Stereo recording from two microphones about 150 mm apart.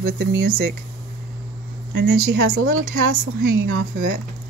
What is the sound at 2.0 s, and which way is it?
Speech, 80° right.